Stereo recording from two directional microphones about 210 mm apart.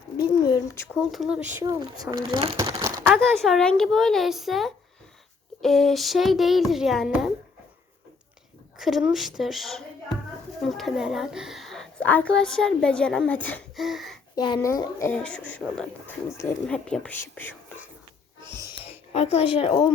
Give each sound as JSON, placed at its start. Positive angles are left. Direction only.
{"t": 0.2, "sound": "a sound", "side_deg": 20}
{"t": 0.9, "sound": "a woman's voice", "side_deg": 0}
{"t": 1.6, "sound": "speech", "side_deg": -20}
{"t": 2.8, "sound": "a sound", "side_deg": -15}
{"t": 3.2, "sound": "a woman's voice", "side_deg": 0}
{"t": 8.8, "sound": "a woman's voice", "side_deg": 0}
{"t": 14.3, "sound": "speech", "side_deg": 20}
{"t": 18.4, "sound": "owl", "side_deg": -20}
{"t": 19.1, "sound": "speech", "side_deg": 30}